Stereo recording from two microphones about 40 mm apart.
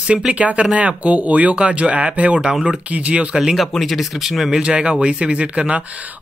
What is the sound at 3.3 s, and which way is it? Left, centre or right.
Speech, centre.